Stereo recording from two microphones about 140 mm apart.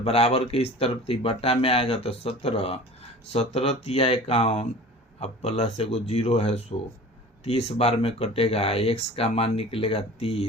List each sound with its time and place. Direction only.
0.0 s speech: 45° left (ahead or behind)